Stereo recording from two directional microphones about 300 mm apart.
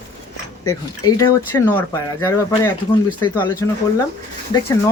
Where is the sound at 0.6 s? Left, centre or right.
Centre.